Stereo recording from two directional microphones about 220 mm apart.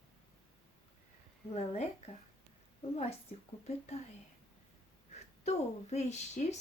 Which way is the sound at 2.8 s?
30° left (ahead or behind).